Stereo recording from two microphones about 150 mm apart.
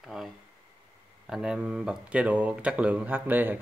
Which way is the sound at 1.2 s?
5° right (ahead or behind).